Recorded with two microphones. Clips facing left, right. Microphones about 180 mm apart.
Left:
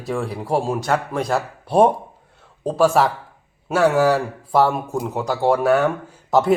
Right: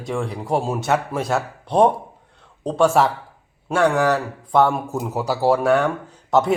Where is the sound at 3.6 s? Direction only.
5° left (ahead or behind).